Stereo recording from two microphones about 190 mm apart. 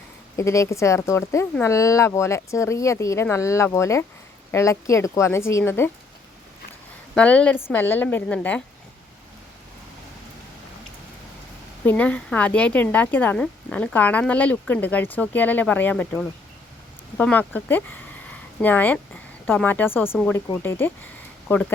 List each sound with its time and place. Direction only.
0.3 s speech: 15° left (ahead or behind)
7.2 s speech: 5° left (ahead or behind)
11.9 s speech: 5° left (ahead or behind)